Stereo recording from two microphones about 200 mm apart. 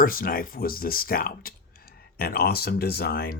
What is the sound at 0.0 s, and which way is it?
Speech, 45° left (ahead or behind).